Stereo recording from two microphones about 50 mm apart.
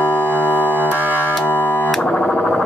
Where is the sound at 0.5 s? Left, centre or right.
Right.